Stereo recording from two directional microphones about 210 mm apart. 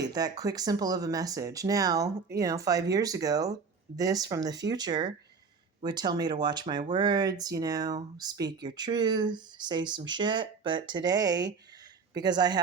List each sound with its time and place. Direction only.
0.0 s speech: 20° right (ahead or behind)